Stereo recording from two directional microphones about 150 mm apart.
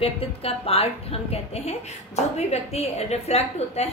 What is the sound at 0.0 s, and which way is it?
A woman's voice, 40° left (ahead or behind).